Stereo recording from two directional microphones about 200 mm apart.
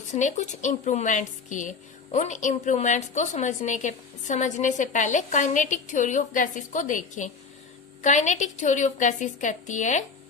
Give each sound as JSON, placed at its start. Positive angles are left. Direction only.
{"t": 0.1, "sound": "a woman's voice", "side_deg": 35}